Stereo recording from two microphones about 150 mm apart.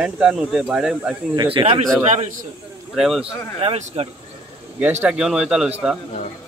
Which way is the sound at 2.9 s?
Centre (ahead or behind).